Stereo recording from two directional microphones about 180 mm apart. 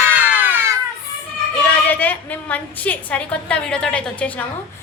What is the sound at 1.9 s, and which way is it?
A woman's voice, 10° left (ahead or behind).